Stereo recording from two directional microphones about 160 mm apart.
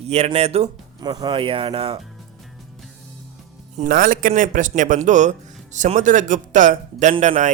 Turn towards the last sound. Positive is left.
turn(degrees=-50)  # may be behind; listen again after turning